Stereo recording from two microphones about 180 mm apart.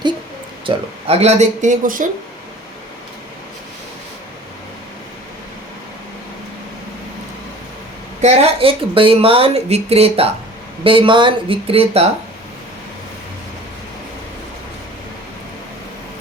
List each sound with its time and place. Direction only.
0.6 s speech: 30° right (ahead or behind); by 2.0 s 50° right (ahead or behind)
8.2 s speech: 35° right (ahead or behind)